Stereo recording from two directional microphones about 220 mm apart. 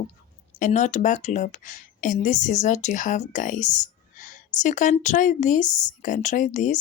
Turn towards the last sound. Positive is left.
turn(degrees=35)  # may be behind; listen again after turning